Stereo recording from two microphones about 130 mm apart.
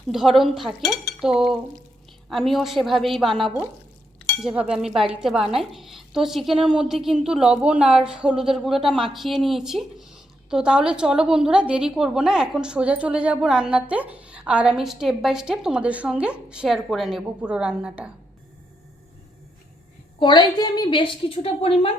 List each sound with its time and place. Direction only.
0.1 s a woman's voice: centre (ahead or behind)
20.1 s a woman's voice: 35° left (ahead or behind)